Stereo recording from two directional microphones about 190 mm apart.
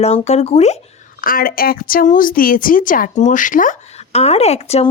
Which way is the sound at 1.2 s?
50° left (ahead or behind).